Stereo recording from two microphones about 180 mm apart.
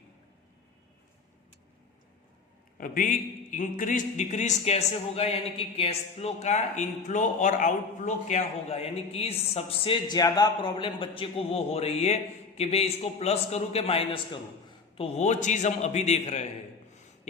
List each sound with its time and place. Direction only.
2.7 s a man's voice: 50° left (ahead or behind)